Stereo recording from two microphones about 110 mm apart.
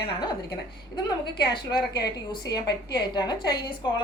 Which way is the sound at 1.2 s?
45° left (ahead or behind).